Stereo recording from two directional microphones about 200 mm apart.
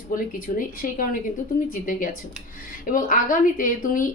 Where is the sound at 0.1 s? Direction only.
45° left (ahead or behind).